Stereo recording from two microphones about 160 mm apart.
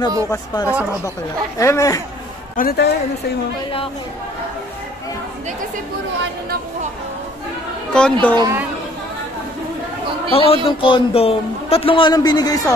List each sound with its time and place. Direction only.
0.3 s speech: 20° left (ahead or behind)
2.5 s a man's voice: 75° left (ahead or behind)
7.9 s speech: 10° left (ahead or behind)
10.3 s a man's voice: 35° left (ahead or behind)